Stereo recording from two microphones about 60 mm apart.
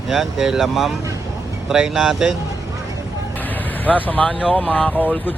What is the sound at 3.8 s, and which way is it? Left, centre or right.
Speech, left.